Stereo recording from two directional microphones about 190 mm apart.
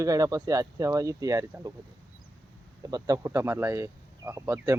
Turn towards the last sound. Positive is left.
turn(degrees=-15)  # may be behind; listen again after turning